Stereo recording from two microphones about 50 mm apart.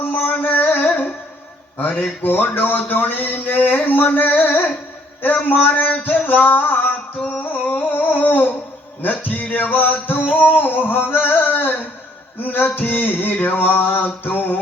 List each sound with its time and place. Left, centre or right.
0.0 s music: left
2.2 s speech: left
7.2 s humming: left
9.0 s speech: left
10.6 s a sound: left
12.4 s speech: left